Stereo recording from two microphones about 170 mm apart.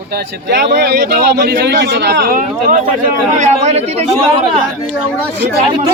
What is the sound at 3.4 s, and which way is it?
Speech, 45° right (ahead or behind).